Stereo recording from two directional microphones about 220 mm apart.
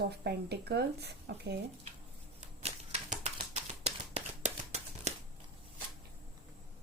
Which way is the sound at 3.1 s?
30° right (ahead or behind).